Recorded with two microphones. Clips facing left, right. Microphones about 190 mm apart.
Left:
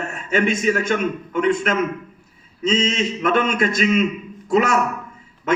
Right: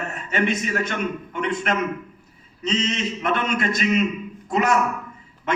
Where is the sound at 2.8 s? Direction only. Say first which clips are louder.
Left 4 dB; 50° left (ahead or behind).